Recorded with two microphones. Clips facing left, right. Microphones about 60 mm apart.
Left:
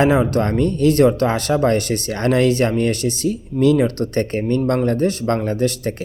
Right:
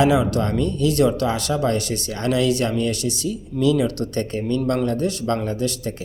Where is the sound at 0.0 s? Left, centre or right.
Left.